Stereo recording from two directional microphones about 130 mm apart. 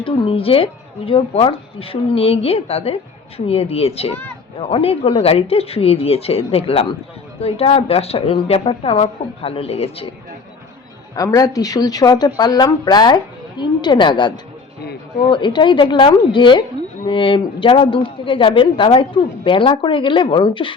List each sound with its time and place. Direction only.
0.0 s speech: 45° left (ahead or behind)
11.1 s a woman's voice: 25° left (ahead or behind)